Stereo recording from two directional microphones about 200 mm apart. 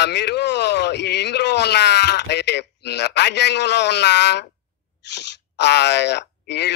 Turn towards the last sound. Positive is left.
turn(degrees=55)  # may be behind; listen again after turning